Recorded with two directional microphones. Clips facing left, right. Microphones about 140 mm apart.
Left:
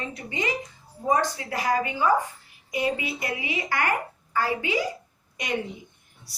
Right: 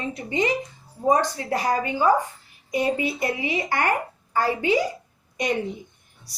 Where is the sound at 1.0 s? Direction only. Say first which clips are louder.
Right 3 dB; 35° right (ahead or behind).